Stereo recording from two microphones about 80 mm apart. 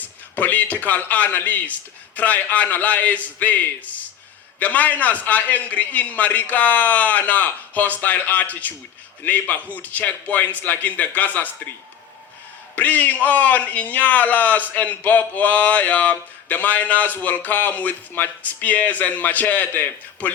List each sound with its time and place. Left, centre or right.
0.0 s speech: left
12.7 s speech: left